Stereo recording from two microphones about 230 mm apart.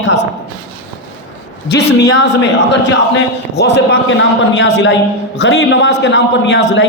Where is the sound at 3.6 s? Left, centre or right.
Left.